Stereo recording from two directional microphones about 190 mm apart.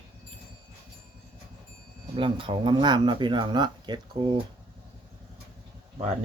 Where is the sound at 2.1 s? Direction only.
25° right (ahead or behind).